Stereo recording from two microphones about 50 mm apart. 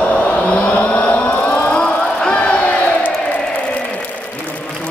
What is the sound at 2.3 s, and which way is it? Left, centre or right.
Crowd, left.